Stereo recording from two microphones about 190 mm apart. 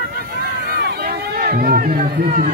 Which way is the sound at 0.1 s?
55° right (ahead or behind).